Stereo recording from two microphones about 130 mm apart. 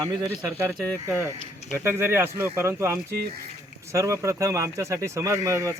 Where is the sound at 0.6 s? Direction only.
20° right (ahead or behind).